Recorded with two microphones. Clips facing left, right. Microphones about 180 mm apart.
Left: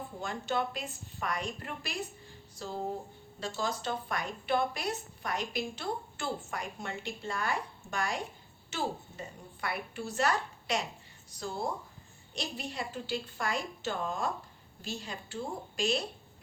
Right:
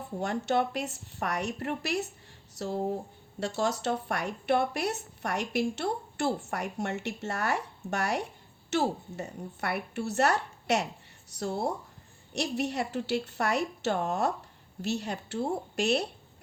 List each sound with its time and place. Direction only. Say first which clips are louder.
0.2 s speech: right 6 dB; 70° right (ahead or behind)